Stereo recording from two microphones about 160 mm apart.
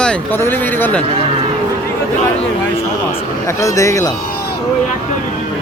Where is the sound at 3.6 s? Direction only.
20° left (ahead or behind).